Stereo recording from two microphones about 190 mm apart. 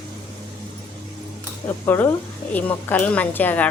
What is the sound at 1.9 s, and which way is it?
A woman's voice, 10° left (ahead or behind).